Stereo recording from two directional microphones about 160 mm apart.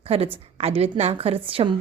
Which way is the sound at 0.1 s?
40° right (ahead or behind).